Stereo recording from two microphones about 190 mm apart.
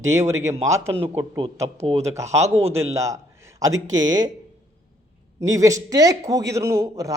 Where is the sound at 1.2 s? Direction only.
20° right (ahead or behind).